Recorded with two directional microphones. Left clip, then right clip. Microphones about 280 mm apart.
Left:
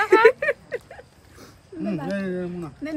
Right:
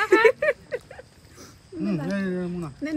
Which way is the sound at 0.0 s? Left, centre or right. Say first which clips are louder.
Left 3 dB; left.